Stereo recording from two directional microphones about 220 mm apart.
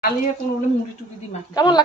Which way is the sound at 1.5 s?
20° left (ahead or behind).